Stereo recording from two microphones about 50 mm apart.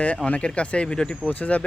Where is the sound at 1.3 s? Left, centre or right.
Left.